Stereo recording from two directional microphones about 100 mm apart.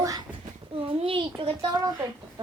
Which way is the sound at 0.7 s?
70° right (ahead or behind).